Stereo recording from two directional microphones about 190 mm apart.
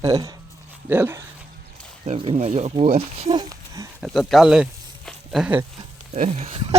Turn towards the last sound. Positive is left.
turn(degrees=-30)  # may be behind; listen again after turning